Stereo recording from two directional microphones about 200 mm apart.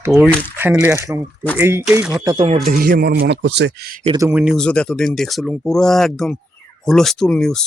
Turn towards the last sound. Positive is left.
turn(degrees=5)  # may be behind; listen again after turning